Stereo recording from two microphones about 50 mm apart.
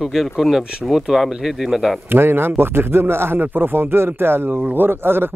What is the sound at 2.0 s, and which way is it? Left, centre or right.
A man's voice, right.